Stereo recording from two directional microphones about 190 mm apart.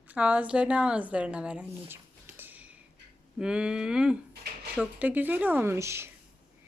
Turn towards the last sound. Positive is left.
turn(degrees=-15)  # may be behind; listen again after turning